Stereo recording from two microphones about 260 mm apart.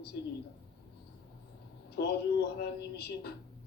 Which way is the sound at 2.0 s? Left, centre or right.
Left.